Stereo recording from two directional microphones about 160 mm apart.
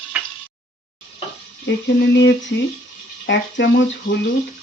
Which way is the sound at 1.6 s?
90° left.